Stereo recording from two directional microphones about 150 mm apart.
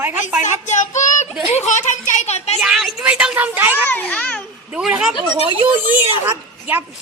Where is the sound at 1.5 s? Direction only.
50° left (ahead or behind).